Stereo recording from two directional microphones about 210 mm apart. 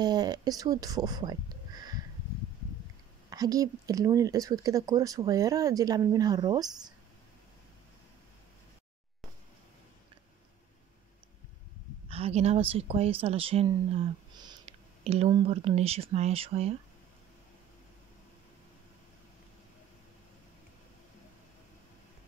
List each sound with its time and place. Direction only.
0.0 s speech: 20° right (ahead or behind)
3.3 s speech: 15° right (ahead or behind)
12.1 s speech: 30° right (ahead or behind)